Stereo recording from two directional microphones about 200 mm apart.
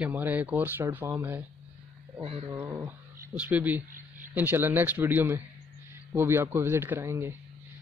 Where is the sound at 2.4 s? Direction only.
10° right (ahead or behind).